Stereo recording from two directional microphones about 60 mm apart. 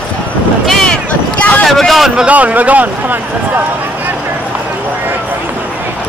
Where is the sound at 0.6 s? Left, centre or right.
Centre.